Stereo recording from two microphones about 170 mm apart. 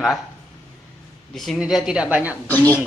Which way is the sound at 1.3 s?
Centre (ahead or behind).